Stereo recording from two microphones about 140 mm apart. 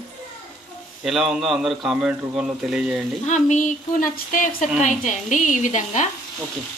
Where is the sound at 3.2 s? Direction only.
60° left (ahead or behind); by 4.6 s 75° left (ahead or behind).